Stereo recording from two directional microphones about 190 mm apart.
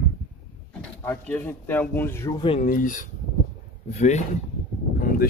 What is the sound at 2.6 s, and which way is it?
Speech, 45° left (ahead or behind).